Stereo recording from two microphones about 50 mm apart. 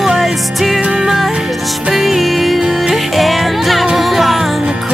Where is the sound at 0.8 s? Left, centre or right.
Centre.